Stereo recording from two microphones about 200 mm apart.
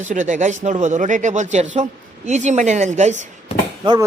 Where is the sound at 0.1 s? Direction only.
40° right (ahead or behind).